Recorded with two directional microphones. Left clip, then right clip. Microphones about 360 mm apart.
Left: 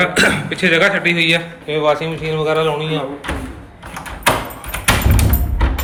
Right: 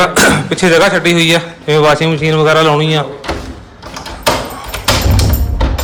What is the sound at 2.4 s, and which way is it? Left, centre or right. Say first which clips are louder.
Speech: right 7 dB; right.